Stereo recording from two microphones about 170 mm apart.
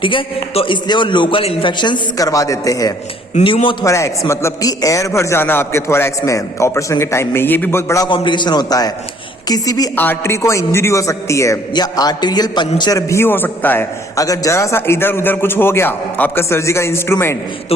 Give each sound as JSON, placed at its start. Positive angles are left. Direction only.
{"t": 0.0, "sound": "a man's voice", "side_deg": 30}
{"t": 3.4, "sound": "a man's voice", "side_deg": 30}
{"t": 3.8, "sound": "a man's voice", "side_deg": 20}
{"t": 8.1, "sound": "a man's voice", "side_deg": 30}
{"t": 9.9, "sound": "a man's voice", "side_deg": 10}